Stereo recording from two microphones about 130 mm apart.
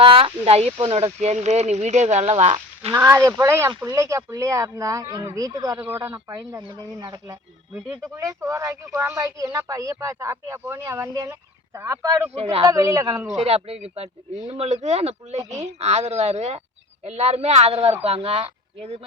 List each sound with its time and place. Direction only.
0.0 s speech: 45° right (ahead or behind)
2.9 s speech: 20° right (ahead or behind)
5.7 s speech: 15° right (ahead or behind)
12.3 s speech: 50° right (ahead or behind)
12.6 s speech: 25° right (ahead or behind)
13.3 s speech: 50° right (ahead or behind)